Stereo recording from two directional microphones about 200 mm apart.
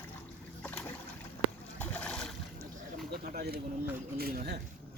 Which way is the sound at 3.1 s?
50° right (ahead or behind).